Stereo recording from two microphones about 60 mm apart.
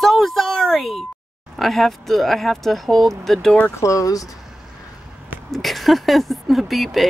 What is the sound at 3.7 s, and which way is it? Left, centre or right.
Speech, left.